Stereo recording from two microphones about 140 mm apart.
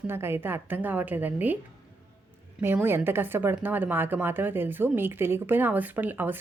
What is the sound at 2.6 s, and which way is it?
A woman's voice, 15° right (ahead or behind).